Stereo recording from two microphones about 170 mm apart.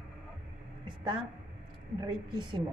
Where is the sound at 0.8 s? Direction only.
25° right (ahead or behind).